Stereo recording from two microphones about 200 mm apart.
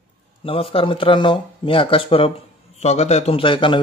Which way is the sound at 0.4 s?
25° left (ahead or behind).